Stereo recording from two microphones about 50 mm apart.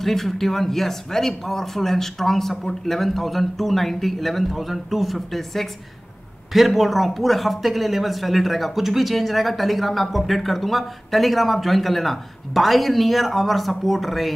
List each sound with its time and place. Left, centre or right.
0.0 s speech: centre